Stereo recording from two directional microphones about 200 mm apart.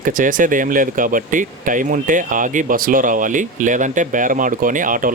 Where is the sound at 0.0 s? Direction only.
40° right (ahead or behind).